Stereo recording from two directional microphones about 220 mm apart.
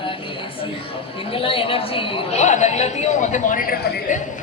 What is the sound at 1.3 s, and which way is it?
A woman's voice, 25° left (ahead or behind).